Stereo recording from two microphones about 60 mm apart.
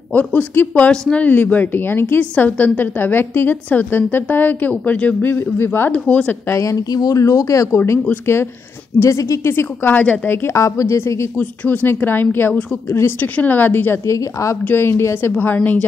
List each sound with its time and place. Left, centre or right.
0.1 s a woman's voice: left
5.2 s a woman's voice: left
5.9 s speech: left
6.5 s speech: left
7.7 s speech: left
9.0 s speech: left
9.8 s speech: left
10.2 s a woman's voice: left
10.5 s a woman's voice: left
11.3 s a woman's voice: left
14.0 s a woman's voice: left
14.7 s speech: left
15.3 s speech: left